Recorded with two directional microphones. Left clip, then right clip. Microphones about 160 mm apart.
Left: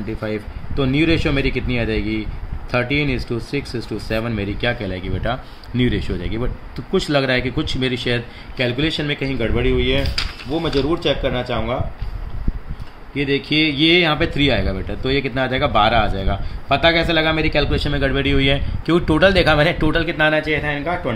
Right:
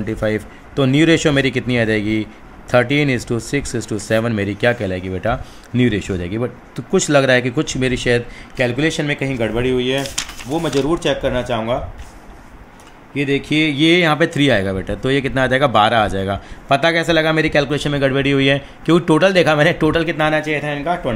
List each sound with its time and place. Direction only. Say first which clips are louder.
0.0 s speech: right 5 dB; 45° right (ahead or behind)
13.1 s speech: right 1 dB; 35° right (ahead or behind)